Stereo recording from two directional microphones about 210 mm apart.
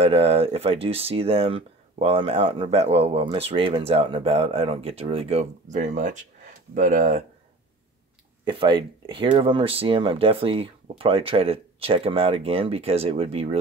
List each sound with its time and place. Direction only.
0.0 s speech: 25° right (ahead or behind)
8.5 s speech: 25° right (ahead or behind)